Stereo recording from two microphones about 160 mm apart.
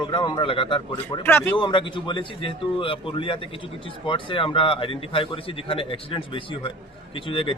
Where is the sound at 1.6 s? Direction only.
30° left (ahead or behind).